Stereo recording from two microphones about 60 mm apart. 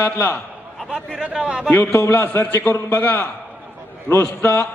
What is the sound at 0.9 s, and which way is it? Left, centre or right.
Speech, centre.